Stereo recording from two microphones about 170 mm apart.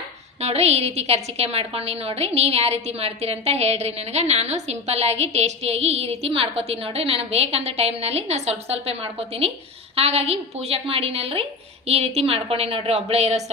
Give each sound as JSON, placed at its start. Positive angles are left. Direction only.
{"t": 0.4, "sound": "a woman's voice", "side_deg": -40}